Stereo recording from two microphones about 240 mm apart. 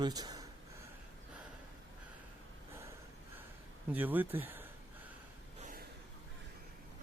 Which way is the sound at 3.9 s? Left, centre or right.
Centre.